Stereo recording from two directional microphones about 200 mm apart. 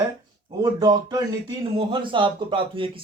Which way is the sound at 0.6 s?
20° right (ahead or behind).